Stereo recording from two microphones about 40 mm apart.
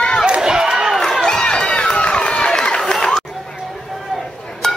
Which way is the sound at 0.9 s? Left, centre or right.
Centre.